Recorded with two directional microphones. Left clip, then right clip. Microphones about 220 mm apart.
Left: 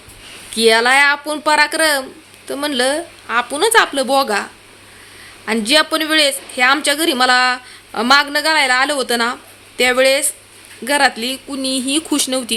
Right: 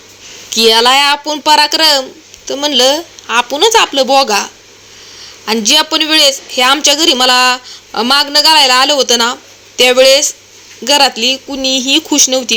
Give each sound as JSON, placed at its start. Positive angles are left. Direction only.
{"t": 0.5, "sound": "a woman's voice", "side_deg": -10}
{"t": 5.5, "sound": "a woman's voice", "side_deg": -5}